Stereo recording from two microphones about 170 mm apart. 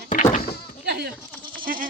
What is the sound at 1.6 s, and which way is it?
Goat, 55° right (ahead or behind).